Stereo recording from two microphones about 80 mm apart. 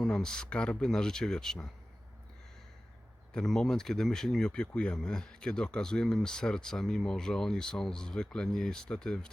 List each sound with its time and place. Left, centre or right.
0.0 s speech: centre
3.3 s speech: centre